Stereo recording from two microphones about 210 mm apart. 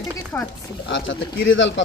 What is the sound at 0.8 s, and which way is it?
Speech, 60° left (ahead or behind).